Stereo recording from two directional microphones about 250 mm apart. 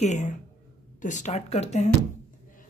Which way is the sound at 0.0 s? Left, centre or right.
Left.